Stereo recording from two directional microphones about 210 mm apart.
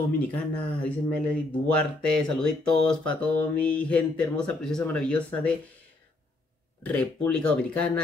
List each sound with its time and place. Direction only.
0.3 s speech: 5° left (ahead or behind)
6.8 s speech: 5° left (ahead or behind)